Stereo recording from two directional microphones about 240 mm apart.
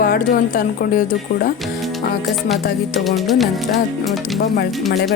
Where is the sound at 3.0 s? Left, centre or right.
Centre.